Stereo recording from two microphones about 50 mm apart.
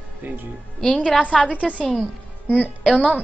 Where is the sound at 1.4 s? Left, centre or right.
Left.